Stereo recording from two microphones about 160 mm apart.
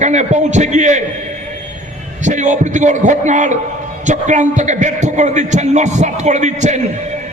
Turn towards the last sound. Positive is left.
turn(degrees=-45)  # may be behind; listen again after turning